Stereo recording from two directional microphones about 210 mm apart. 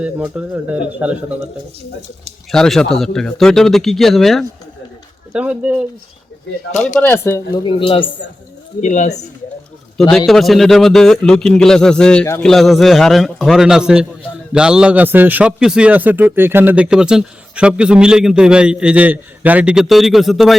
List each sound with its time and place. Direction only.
0.0 s a man's voice: 5° right (ahead or behind)
2.5 s a man's voice: centre (ahead or behind)
6.7 s speech: 35° left (ahead or behind)
7.0 s speech: 10° left (ahead or behind)
8.8 s speech: 35° left (ahead or behind)
10.0 s a man's voice: centre (ahead or behind)